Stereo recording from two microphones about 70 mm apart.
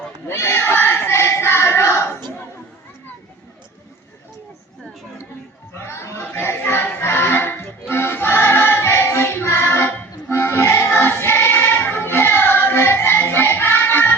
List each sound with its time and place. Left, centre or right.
0.3 s a sound: left
5.8 s music: left
10.9 s child singing: left